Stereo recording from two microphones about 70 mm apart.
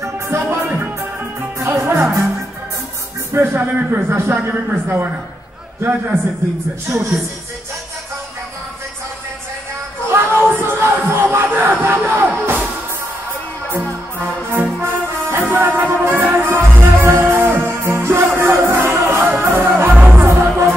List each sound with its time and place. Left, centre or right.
0.0 s music: right
0.7 s music: right
3.3 s a man's voice: right
10.0 s music: right
13.7 s music: right
20.0 s music: centre
20.2 s music: right